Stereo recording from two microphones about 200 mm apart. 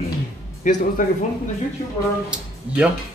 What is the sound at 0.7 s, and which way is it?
Speech, 40° left (ahead or behind).